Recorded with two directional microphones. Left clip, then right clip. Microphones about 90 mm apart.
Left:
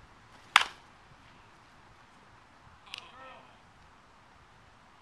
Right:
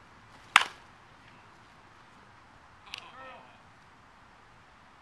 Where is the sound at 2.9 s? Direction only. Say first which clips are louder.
Right 1 dB; 20° right (ahead or behind).